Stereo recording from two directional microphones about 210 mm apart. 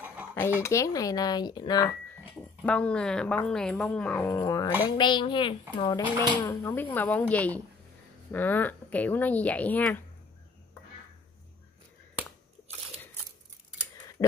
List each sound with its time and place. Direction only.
0.6 s speech: 15° left (ahead or behind)
2.6 s speech: 5° left (ahead or behind)